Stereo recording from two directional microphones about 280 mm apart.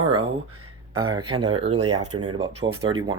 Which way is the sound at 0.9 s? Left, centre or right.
Right.